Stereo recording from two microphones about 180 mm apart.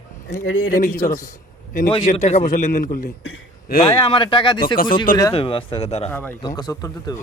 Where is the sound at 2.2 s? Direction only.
40° left (ahead or behind).